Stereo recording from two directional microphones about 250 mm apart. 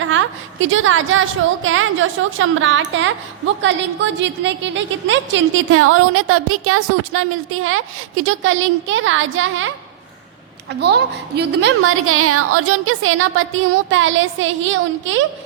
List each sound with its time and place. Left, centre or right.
0.0 s a woman's voice: right